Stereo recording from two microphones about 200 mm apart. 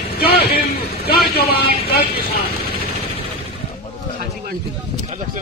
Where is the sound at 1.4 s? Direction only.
50° left (ahead or behind).